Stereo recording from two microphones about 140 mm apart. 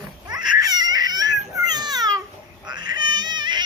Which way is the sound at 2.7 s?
30° right (ahead or behind).